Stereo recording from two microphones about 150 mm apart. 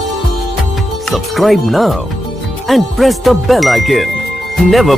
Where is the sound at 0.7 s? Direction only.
Centre (ahead or behind).